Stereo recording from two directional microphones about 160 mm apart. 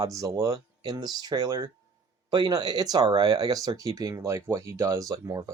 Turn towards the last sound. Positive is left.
turn(degrees=-20)  # may be behind; listen again after turning